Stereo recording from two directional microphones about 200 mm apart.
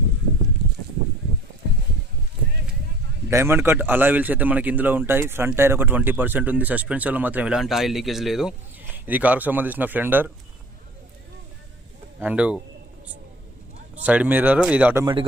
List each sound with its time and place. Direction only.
3.2 s a man's voice: 10° right (ahead or behind)
12.2 s a man's voice: 5° right (ahead or behind)
14.0 s a man's voice: 5° right (ahead or behind)
15.0 s a man's voice: 25° right (ahead or behind)